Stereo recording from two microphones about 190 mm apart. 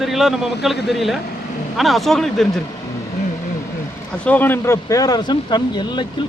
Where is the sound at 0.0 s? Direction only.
Centre (ahead or behind).